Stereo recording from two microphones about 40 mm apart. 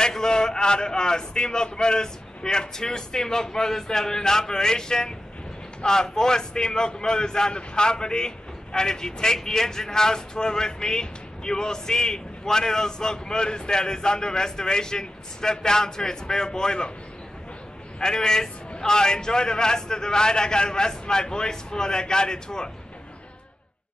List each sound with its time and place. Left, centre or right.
0.0 s a man's voice: centre
17.9 s a man's voice: centre